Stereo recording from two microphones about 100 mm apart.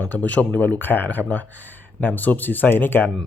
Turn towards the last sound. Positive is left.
turn(degrees=20)  # may be behind; listen again after turning